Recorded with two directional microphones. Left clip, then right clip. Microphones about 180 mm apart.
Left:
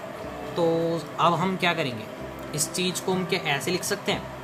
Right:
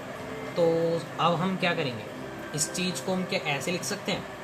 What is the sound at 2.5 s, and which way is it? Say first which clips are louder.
Speech: left 3 dB; 40° left (ahead or behind).